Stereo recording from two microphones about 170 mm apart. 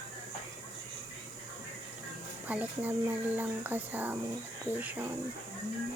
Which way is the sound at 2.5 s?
10° right (ahead or behind).